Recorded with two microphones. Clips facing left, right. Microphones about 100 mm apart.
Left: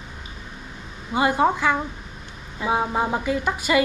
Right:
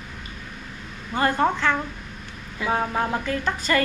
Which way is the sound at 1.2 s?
10° left (ahead or behind).